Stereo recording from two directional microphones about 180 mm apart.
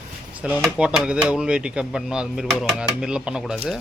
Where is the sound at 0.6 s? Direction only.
5° right (ahead or behind).